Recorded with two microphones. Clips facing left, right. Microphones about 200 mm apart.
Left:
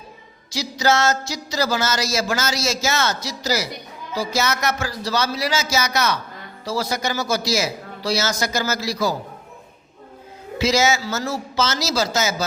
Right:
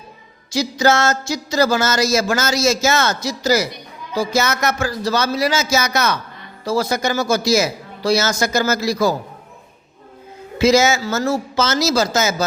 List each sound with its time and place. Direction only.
0.5 s speech: 50° right (ahead or behind)
10.6 s speech: 50° right (ahead or behind)